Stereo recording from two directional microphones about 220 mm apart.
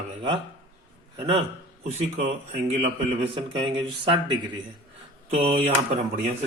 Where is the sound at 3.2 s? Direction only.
25° right (ahead or behind).